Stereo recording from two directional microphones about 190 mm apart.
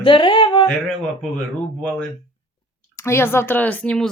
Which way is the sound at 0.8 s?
Centre (ahead or behind).